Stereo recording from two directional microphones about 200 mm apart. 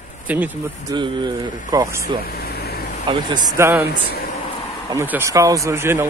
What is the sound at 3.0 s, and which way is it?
Speech, 20° right (ahead or behind).